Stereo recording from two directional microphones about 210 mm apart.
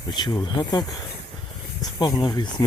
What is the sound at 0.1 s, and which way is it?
Speech, 20° left (ahead or behind).